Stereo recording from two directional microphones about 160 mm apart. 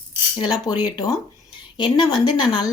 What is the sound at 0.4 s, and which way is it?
A woman's voice, 25° left (ahead or behind).